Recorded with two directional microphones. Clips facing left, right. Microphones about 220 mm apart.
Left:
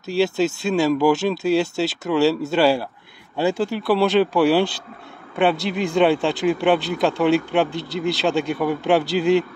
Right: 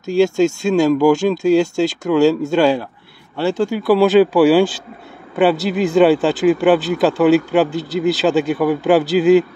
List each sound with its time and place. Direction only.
0.0 s speech: centre (ahead or behind)
3.6 s speech: centre (ahead or behind)